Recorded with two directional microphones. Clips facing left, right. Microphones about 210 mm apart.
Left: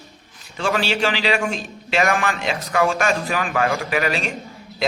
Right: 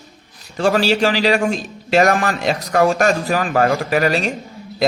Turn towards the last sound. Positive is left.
turn(degrees=-40)  # may be behind; listen again after turning